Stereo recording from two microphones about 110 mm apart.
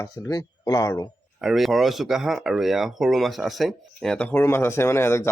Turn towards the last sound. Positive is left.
turn(degrees=25)  # may be behind; listen again after turning